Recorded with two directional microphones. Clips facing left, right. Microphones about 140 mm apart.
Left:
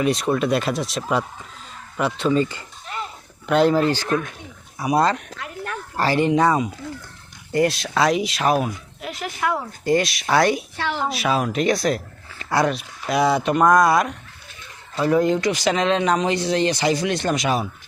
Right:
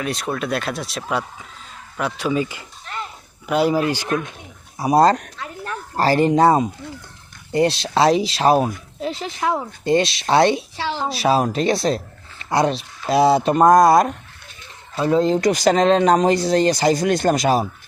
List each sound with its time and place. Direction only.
0.0 s speech: centre (ahead or behind)
2.9 s a sound: 5° left (ahead or behind)
3.4 s speech: 5° right (ahead or behind)
4.8 s speech: 35° right (ahead or behind)
14.9 s speech: 25° right (ahead or behind)
15.4 s speech: 40° right (ahead or behind)